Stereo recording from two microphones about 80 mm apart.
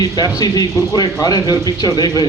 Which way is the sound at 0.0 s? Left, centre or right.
Left.